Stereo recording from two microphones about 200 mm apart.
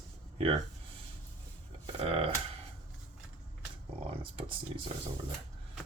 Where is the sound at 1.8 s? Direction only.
30° right (ahead or behind).